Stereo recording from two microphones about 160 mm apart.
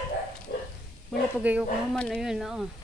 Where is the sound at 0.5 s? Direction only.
90° left.